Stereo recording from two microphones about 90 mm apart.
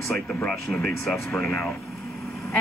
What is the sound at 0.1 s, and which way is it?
A woman's voice, 10° left (ahead or behind).